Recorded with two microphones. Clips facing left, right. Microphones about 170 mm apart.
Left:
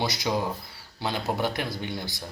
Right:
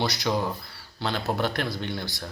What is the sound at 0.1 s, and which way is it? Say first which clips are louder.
Speech: right 1 dB; 15° left (ahead or behind).